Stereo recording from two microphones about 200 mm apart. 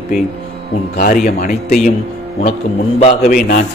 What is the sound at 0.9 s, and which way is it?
Speech, 45° left (ahead or behind).